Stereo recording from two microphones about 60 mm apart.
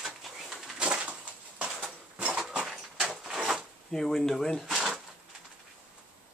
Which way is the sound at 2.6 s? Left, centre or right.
Centre.